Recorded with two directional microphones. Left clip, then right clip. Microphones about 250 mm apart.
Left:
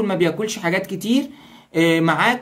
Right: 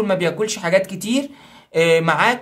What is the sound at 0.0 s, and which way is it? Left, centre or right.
Speech, centre.